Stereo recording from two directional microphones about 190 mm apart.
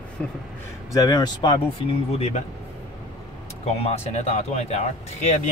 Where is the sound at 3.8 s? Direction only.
35° left (ahead or behind).